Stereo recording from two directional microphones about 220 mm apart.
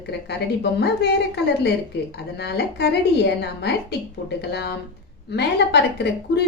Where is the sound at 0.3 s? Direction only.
50° left (ahead or behind).